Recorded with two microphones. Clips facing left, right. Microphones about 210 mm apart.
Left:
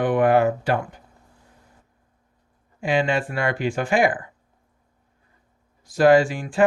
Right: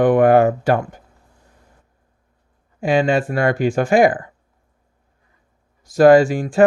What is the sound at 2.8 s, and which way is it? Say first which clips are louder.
Speech: right 5 dB; 40° right (ahead or behind).